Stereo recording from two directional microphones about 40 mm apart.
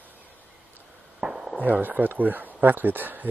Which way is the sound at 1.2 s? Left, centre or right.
Centre.